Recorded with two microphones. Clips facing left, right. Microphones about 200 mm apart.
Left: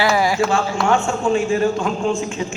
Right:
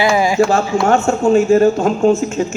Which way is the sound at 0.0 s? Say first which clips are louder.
Right 3 dB; 20° right (ahead or behind).